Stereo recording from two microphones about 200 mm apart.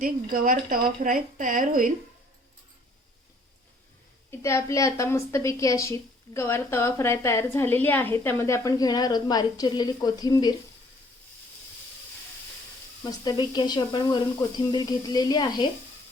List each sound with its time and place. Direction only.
0.0 s a woman's voice: 45° right (ahead or behind)
4.3 s a woman's voice: 15° left (ahead or behind)
13.0 s speech: 20° left (ahead or behind)